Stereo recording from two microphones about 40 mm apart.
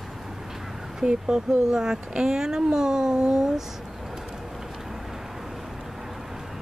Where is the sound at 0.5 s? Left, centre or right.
Centre.